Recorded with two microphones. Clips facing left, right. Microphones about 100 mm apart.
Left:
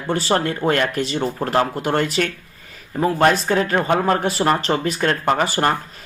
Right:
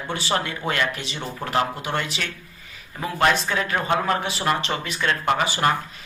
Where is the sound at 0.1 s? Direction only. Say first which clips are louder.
Left 6 dB; 40° left (ahead or behind).